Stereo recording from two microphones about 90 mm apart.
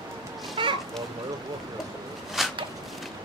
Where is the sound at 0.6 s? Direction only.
65° right (ahead or behind).